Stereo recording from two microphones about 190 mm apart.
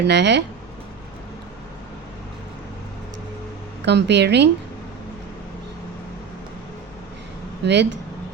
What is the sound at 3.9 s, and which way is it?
Speech, 65° right (ahead or behind).